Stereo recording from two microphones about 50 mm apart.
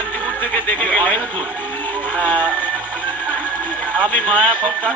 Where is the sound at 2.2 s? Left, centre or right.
Left.